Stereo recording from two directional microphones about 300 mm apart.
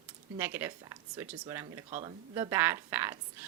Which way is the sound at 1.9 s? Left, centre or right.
Right.